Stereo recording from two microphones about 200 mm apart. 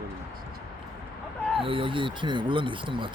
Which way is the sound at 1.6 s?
25° right (ahead or behind).